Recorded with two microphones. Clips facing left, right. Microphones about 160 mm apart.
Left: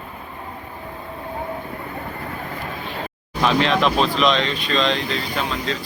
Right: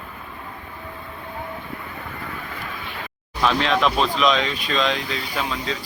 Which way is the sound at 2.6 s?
35° left (ahead or behind).